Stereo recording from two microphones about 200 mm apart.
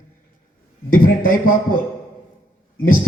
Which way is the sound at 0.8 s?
45° left (ahead or behind).